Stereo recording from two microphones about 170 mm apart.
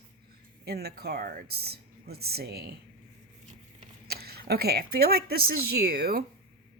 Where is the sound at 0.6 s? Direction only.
70° right (ahead or behind).